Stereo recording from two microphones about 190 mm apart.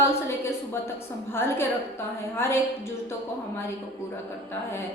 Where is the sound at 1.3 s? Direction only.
10° left (ahead or behind).